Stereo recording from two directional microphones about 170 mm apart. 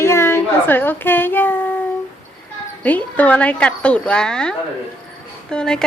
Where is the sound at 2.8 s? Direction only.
10° left (ahead or behind).